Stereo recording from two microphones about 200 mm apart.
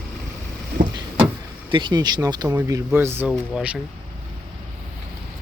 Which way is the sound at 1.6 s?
25° right (ahead or behind).